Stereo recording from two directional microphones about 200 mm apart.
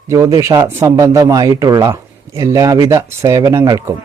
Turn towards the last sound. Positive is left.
turn(degrees=-15)  # may be behind; listen again after turning